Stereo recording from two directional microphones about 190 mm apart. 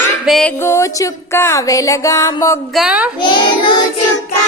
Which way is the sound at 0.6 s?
15° left (ahead or behind).